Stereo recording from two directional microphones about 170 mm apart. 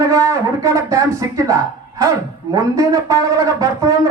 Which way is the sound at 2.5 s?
20° right (ahead or behind).